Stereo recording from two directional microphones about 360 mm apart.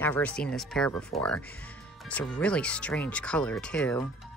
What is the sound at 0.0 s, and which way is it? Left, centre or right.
Speech, centre.